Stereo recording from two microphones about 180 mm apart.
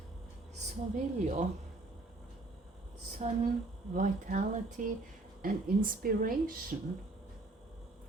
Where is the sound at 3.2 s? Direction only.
40° right (ahead or behind).